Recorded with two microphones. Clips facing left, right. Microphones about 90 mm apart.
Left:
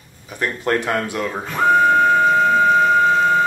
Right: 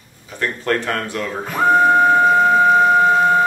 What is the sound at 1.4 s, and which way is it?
Music, 10° right (ahead or behind).